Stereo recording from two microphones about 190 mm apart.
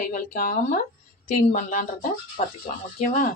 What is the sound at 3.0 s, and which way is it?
Speech, 50° left (ahead or behind).